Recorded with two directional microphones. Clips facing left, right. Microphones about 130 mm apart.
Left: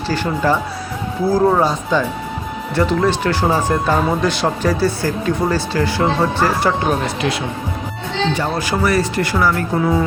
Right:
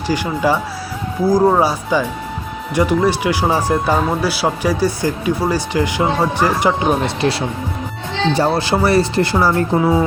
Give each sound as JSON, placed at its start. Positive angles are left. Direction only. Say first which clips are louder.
{"t": 0.1, "sound": "speech", "louder": "right 1 dB", "side_deg": -10}
{"t": 7.2, "sound": "speech", "louder": "right 2 dB", "side_deg": -30}